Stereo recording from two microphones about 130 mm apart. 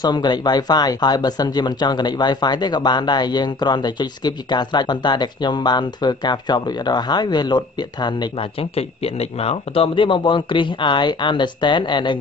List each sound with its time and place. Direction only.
0.0 s speech: 35° left (ahead or behind)